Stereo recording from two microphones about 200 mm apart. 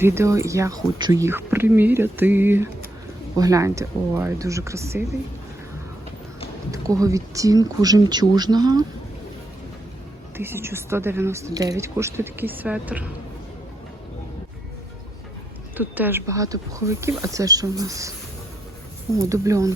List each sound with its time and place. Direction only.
0.0 s speech: 15° right (ahead or behind)
6.7 s speech: 15° right (ahead or behind)
10.3 s speech: 10° right (ahead or behind)
15.8 s speech: 10° right (ahead or behind)
19.1 s speech: 15° right (ahead or behind)